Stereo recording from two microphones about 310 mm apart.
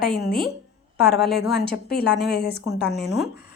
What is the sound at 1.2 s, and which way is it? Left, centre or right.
Speech, centre.